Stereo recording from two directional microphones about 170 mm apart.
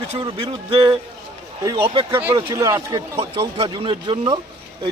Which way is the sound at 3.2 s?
35° right (ahead or behind).